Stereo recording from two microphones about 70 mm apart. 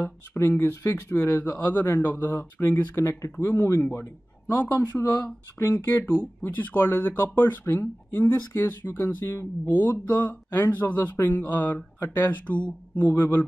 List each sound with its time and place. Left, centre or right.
0.0 s speech: left
4.9 s speech: left
5.9 s speech: left
13.1 s speech: left